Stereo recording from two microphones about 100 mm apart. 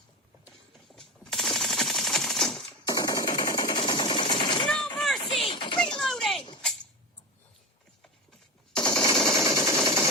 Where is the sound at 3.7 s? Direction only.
50° left (ahead or behind).